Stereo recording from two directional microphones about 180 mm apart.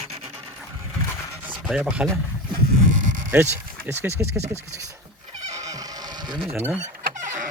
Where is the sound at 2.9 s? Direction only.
45° right (ahead or behind).